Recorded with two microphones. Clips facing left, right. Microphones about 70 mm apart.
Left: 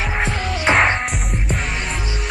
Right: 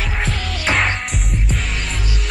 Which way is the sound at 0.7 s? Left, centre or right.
Left.